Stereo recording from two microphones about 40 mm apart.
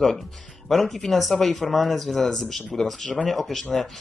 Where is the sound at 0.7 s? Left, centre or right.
Centre.